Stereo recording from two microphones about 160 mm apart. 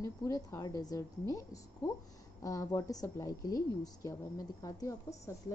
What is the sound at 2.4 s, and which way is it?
A woman's voice, 20° left (ahead or behind).